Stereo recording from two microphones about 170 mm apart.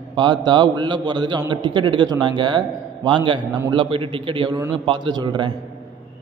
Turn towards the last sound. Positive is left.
turn(degrees=-25)  # may be behind; listen again after turning